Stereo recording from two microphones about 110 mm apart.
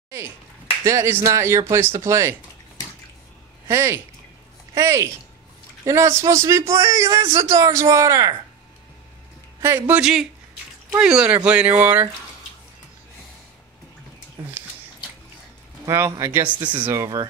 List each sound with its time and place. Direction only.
0.8 s speech: 25° right (ahead or behind)
3.6 s speech: 25° right (ahead or behind)
9.6 s speech: 25° right (ahead or behind)
9.9 s speech: 5° right (ahead or behind)
15.8 s speech: 25° right (ahead or behind)
16.9 s speech: 30° right (ahead or behind)